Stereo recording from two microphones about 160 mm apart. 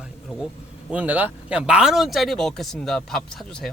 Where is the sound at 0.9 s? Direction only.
10° right (ahead or behind).